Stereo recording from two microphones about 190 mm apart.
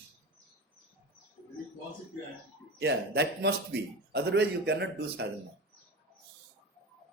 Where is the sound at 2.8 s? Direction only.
60° right (ahead or behind).